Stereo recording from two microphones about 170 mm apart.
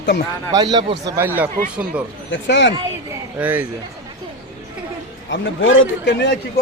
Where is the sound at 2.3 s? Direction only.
90° left.